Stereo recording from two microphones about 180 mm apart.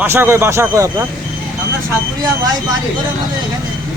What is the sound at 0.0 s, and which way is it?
Speech, 10° right (ahead or behind).